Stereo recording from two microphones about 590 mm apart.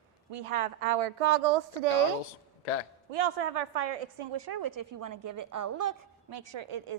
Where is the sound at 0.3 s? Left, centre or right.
Right.